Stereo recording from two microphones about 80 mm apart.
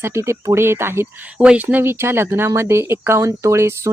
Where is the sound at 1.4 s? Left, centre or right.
Centre; by 3.9 s right.